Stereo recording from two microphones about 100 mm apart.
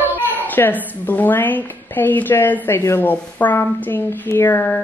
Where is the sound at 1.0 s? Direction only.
20° left (ahead or behind).